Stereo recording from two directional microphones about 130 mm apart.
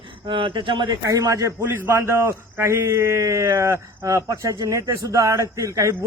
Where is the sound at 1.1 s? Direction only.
25° right (ahead or behind).